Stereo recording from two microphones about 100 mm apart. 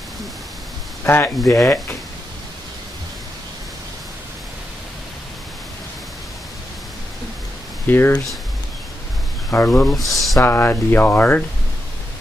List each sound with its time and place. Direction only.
1.0 s speech: 20° left (ahead or behind)
7.8 s speech: 20° left (ahead or behind)
9.5 s speech: 25° left (ahead or behind)
9.9 s speech: centre (ahead or behind)
10.4 s speech: 20° left (ahead or behind)